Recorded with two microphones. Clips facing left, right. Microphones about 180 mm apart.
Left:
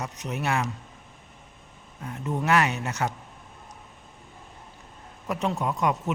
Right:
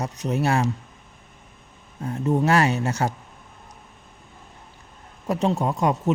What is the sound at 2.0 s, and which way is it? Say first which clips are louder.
Speech: right 6 dB; 35° right (ahead or behind).